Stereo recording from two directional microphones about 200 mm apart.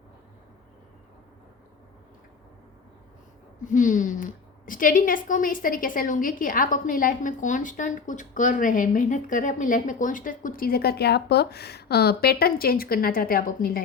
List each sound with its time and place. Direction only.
3.6 s a woman's voice: 40° left (ahead or behind)